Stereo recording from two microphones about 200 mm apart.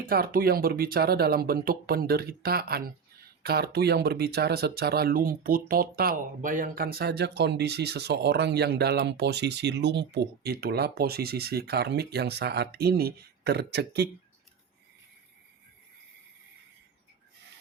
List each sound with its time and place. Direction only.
0.1 s speech: 45° right (ahead or behind)